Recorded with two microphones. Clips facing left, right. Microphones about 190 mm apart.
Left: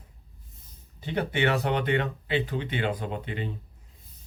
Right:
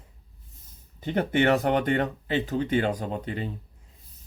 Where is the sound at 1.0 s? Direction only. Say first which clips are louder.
Right 3 dB; 50° right (ahead or behind).